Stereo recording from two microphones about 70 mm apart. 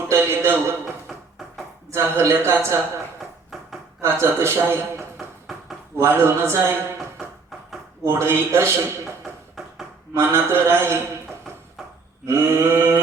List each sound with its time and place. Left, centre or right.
0.1 s a sound: right
1.0 s dishes: centre
1.9 s a man's voice: right
3.5 s a sound: centre
4.0 s a man's voice: right
5.1 s a sound: centre
6.1 s a man's voice: right
8.0 s a man's voice: right
9.2 s music: centre
10.2 s a man's voice: right
11.8 s a sound: centre
12.2 s a man's voice: right